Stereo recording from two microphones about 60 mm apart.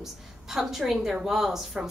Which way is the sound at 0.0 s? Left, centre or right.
Centre.